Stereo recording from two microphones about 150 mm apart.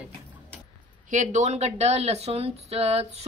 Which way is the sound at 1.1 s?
55° right (ahead or behind).